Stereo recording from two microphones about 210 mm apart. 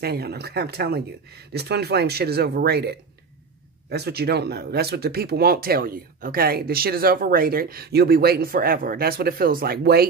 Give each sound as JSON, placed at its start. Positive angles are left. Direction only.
{"t": 0.0, "sound": "speech", "side_deg": -50}